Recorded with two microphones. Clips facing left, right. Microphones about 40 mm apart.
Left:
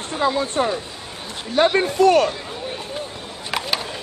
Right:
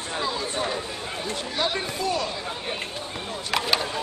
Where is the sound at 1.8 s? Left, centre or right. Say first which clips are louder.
Left 12 dB; left.